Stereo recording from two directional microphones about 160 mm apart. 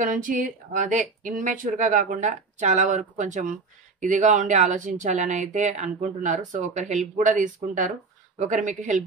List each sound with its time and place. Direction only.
0.0 s speech: 55° right (ahead or behind)